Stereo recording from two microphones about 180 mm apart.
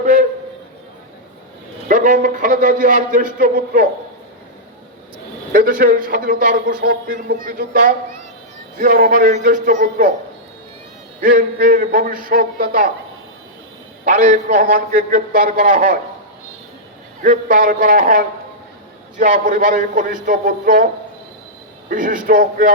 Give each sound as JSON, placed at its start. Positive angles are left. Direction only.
{"t": 0.0, "sound": "a sound", "side_deg": -50}
{"t": 1.9, "sound": "a man's voice", "side_deg": -45}
{"t": 5.5, "sound": "a man's voice", "side_deg": -50}
{"t": 11.2, "sound": "a man's voice", "side_deg": -50}
{"t": 14.0, "sound": "a man's voice", "side_deg": -50}
{"t": 17.2, "sound": "a man's voice", "side_deg": -50}
{"t": 21.8, "sound": "a man's voice", "side_deg": -50}